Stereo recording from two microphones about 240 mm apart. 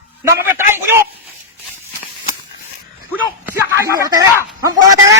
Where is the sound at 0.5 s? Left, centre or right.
Centre.